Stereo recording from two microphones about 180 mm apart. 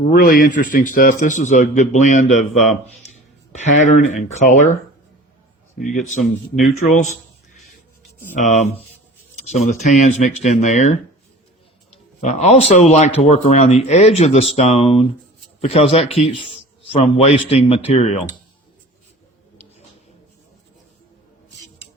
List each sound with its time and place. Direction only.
0.1 s a man's voice: 50° left (ahead or behind)
5.8 s a man's voice: 45° left (ahead or behind)
8.4 s speech: 40° left (ahead or behind)
12.2 s speech: 40° left (ahead or behind)